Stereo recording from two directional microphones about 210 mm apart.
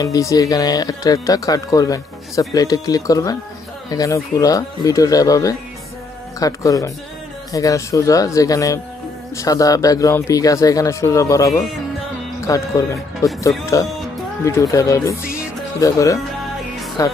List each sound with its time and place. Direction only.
0.0 s speech: 15° left (ahead or behind)